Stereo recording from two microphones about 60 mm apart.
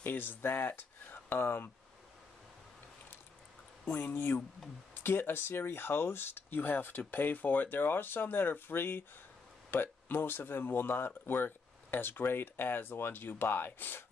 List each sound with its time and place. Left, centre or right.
0.0 s speech: left
3.9 s speech: left